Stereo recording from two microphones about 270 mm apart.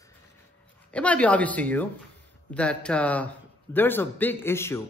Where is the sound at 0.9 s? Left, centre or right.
Centre.